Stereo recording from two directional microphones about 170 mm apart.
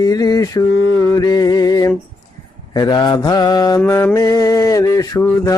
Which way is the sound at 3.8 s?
10° left (ahead or behind).